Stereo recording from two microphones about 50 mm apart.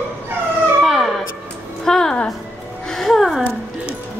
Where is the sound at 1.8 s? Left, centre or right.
Centre.